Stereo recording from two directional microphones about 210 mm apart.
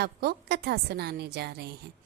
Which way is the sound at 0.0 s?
50° right (ahead or behind).